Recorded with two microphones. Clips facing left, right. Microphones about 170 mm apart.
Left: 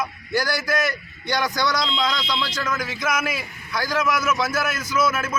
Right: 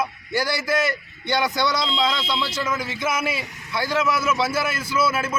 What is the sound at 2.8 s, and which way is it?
A man's voice, 30° right (ahead or behind).